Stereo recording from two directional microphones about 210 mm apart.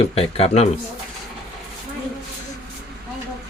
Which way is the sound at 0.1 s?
30° left (ahead or behind).